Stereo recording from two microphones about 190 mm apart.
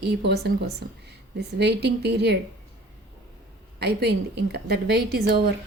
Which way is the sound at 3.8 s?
60° right (ahead or behind).